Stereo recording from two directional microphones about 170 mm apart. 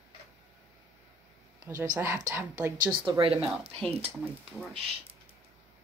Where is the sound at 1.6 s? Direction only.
20° right (ahead or behind).